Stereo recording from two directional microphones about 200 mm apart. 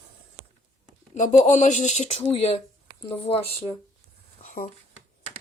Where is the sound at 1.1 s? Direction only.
40° left (ahead or behind).